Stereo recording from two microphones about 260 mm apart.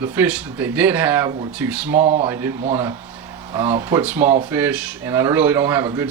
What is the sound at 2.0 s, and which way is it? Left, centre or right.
Speech, right.